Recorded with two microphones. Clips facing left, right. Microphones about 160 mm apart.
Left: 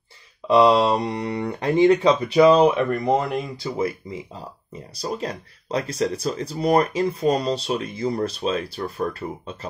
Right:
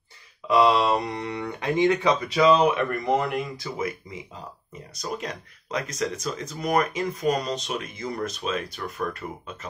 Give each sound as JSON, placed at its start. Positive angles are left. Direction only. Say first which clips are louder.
{"t": 0.5, "sound": "speech", "louder": "left 4 dB", "side_deg": 30}